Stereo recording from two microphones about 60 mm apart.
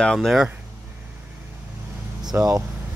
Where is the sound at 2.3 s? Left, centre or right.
Right.